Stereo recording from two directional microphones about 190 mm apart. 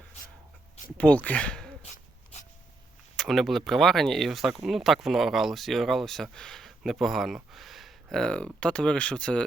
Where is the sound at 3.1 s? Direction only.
Centre (ahead or behind).